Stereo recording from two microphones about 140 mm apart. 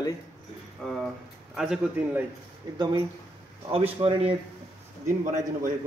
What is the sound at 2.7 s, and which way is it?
Speech, 30° right (ahead or behind).